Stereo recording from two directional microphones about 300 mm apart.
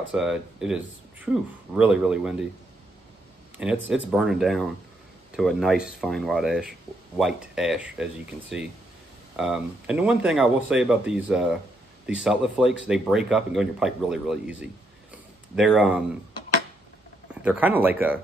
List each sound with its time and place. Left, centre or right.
0.1 s speech: centre
3.5 s speech: centre
17.3 s speech: centre